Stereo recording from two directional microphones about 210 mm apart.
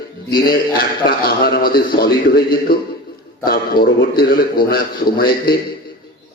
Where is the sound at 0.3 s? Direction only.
45° left (ahead or behind).